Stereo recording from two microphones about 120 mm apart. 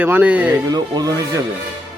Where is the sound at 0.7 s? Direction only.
35° right (ahead or behind).